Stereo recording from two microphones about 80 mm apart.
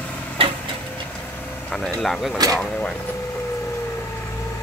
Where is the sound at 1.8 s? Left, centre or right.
Centre.